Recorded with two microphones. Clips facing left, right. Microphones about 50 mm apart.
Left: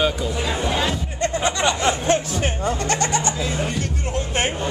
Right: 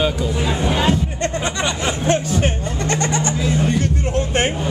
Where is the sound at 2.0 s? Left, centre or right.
Centre.